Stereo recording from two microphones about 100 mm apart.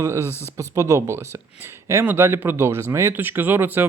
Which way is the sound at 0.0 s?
30° right (ahead or behind).